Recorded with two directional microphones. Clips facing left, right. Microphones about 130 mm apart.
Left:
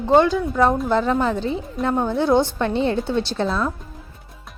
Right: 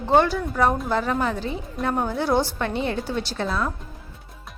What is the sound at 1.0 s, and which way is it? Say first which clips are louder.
Speech: left 4 dB; 25° left (ahead or behind).